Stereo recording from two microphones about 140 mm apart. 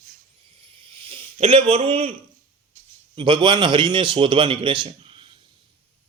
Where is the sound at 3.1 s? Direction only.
35° right (ahead or behind).